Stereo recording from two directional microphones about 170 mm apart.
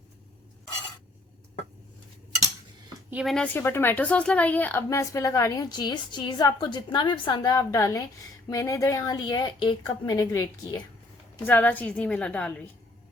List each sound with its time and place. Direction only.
3.1 s a woman's voice: 5° right (ahead or behind); by 10.8 s 20° left (ahead or behind)
11.4 s a woman's voice: 10° left (ahead or behind)